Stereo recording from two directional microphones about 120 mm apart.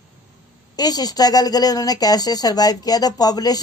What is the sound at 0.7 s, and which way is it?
A woman's voice, 35° left (ahead or behind).